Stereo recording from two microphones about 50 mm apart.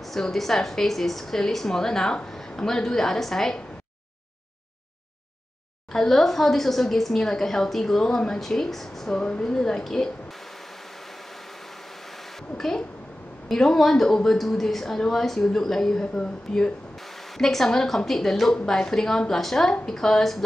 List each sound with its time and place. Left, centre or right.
0.0 s speech: centre
5.9 s speech: centre
9.2 s a sound: centre
13.5 s speech: centre